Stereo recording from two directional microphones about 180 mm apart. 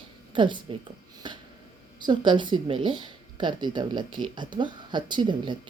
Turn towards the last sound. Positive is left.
turn(degrees=-25)  # may be behind; listen again after turning